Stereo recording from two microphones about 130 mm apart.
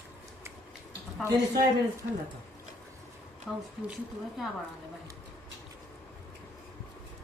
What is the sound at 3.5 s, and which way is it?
Speech, 5° left (ahead or behind).